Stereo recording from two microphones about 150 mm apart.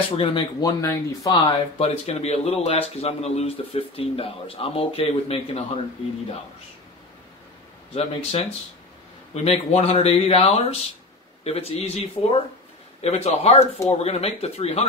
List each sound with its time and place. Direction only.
0.2 s speech: 35° left (ahead or behind)
1.8 s speech: 45° left (ahead or behind)
7.9 s speech: 40° left (ahead or behind)